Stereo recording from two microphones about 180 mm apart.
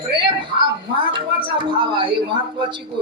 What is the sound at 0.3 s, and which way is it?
A woman's voice, 25° right (ahead or behind).